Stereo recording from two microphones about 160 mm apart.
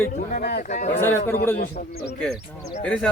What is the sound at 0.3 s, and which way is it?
Speech, 75° left (ahead or behind).